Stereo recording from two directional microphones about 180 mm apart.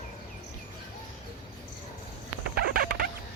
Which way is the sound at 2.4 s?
60° right (ahead or behind).